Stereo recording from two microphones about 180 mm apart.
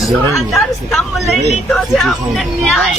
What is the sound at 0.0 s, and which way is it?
A woman's voice, centre (ahead or behind).